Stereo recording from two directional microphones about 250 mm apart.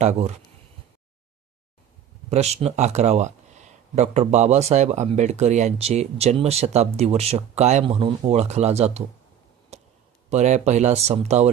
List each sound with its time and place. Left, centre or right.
0.0 s speech: right
2.3 s speech: right
9.7 s a sound: right
10.2 s speech: right